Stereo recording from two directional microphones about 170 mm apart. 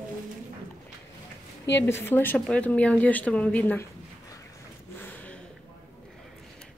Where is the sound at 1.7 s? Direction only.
15° left (ahead or behind).